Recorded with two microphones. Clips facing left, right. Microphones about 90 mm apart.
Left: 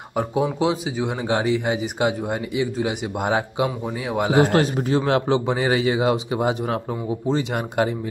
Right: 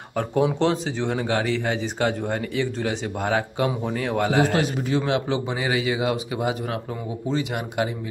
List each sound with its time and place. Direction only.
0.1 s speech: 10° left (ahead or behind)
4.5 s a man's voice: 40° left (ahead or behind)